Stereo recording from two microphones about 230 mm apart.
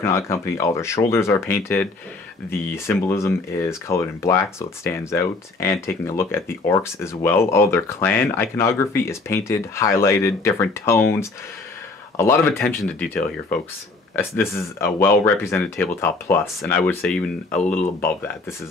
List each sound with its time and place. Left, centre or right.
0.0 s speech: centre